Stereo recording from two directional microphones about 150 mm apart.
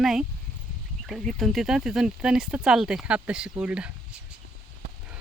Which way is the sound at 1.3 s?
Centre (ahead or behind).